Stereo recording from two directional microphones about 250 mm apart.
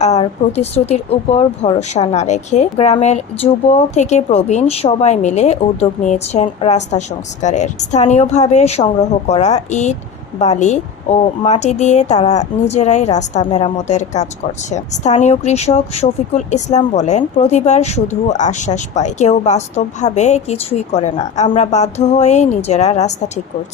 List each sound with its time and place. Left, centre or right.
0.0 s speech: left